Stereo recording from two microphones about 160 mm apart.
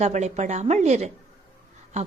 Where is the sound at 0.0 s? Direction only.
45° right (ahead or behind).